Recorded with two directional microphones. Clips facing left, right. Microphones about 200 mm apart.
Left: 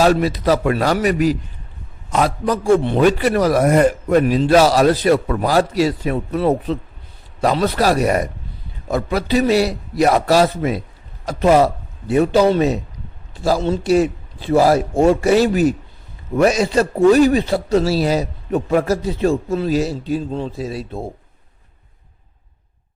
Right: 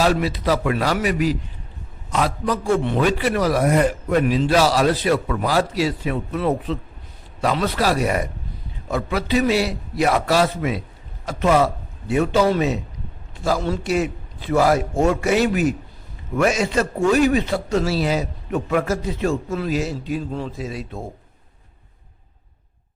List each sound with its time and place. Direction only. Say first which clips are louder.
0.0 s a man's voice: left 4 dB; 45° left (ahead or behind)